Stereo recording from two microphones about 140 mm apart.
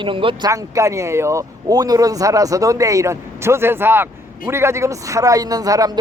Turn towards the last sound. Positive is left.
turn(degrees=-25)  # may be behind; listen again after turning